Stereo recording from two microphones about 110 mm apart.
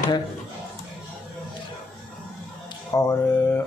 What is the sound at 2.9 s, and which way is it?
Speech, 20° left (ahead or behind).